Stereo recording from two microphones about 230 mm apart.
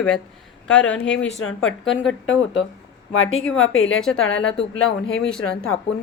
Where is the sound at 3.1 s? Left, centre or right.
Left.